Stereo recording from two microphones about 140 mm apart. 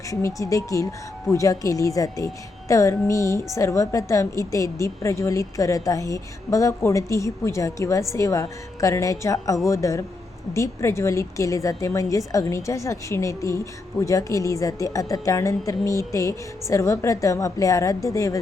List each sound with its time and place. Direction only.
0.1 s speech: 20° left (ahead or behind)